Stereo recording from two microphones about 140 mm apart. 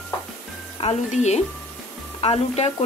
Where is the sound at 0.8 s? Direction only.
50° left (ahead or behind).